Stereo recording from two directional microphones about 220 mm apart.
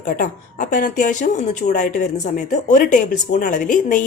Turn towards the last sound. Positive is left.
turn(degrees=35)  # may be behind; listen again after turning